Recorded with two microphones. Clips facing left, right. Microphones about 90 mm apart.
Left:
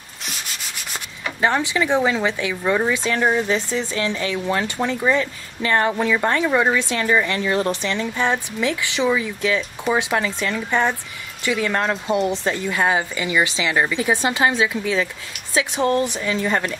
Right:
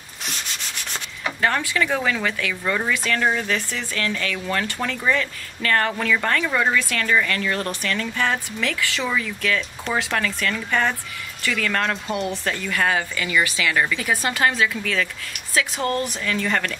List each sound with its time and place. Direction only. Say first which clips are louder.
1.4 s speech: left 3 dB; 20° left (ahead or behind)